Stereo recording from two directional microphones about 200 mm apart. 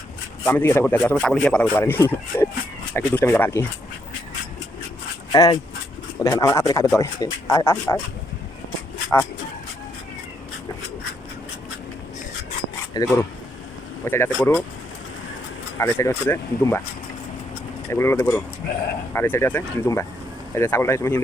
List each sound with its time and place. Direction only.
0.4 s a man's voice: 10° left (ahead or behind)
5.3 s a man's voice: 20° left (ahead or behind)
12.9 s a man's voice: 20° left (ahead or behind)
15.8 s a man's voice: 15° left (ahead or behind)
17.9 s a man's voice: 15° left (ahead or behind)